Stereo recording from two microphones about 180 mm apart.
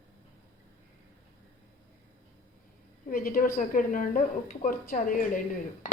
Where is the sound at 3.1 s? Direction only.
55° left (ahead or behind).